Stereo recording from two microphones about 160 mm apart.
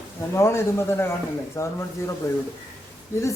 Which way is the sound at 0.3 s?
15° left (ahead or behind).